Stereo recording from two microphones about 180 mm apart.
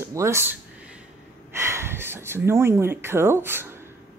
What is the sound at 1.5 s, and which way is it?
Speech, 15° right (ahead or behind).